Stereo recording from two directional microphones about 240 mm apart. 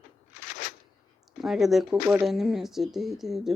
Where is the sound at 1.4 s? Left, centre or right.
Centre.